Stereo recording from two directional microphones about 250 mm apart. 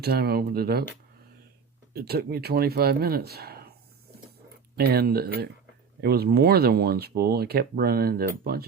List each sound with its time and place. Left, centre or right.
0.0 s speech: right
1.9 s speech: right
4.8 s speech: right